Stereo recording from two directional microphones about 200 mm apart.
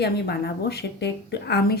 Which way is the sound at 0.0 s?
55° left (ahead or behind).